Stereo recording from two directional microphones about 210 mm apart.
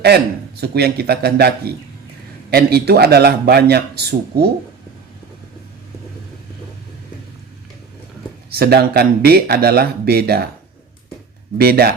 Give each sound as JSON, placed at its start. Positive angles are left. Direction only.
{"t": 0.0, "sound": "a man's voice", "side_deg": -50}
{"t": 8.4, "sound": "a man's voice", "side_deg": -45}
{"t": 11.5, "sound": "a man's voice", "side_deg": -45}